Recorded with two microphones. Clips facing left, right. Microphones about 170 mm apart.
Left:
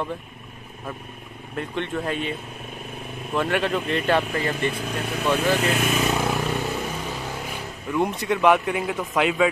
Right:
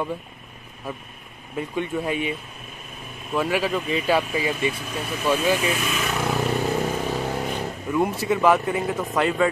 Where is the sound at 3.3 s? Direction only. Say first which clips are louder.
Even; 5° right (ahead or behind).